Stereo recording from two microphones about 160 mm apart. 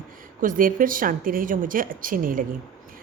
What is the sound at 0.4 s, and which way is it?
Speech, 60° right (ahead or behind).